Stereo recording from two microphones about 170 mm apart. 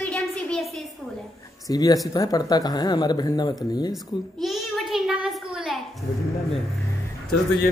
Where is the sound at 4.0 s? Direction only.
Centre (ahead or behind).